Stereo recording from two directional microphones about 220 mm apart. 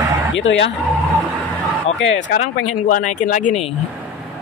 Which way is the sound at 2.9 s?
35° left (ahead or behind).